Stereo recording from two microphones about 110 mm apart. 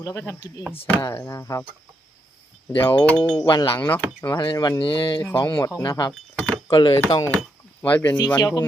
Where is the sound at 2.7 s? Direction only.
20° left (ahead or behind).